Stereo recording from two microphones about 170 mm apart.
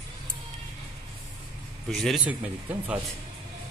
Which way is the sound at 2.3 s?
10° right (ahead or behind).